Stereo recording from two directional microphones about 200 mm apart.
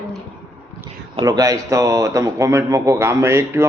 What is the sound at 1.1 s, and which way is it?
Speech, 20° right (ahead or behind).